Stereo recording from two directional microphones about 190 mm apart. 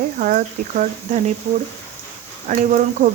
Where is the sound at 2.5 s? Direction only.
40° right (ahead or behind).